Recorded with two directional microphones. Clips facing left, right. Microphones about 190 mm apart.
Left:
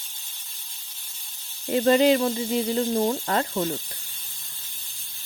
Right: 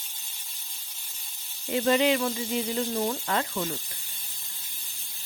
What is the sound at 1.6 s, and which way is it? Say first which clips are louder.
Speech: left 5 dB; 35° left (ahead or behind).